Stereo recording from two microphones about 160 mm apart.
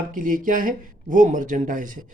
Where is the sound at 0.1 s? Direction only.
60° right (ahead or behind).